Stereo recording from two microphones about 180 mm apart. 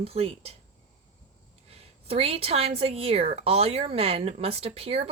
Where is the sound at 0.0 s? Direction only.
30° right (ahead or behind).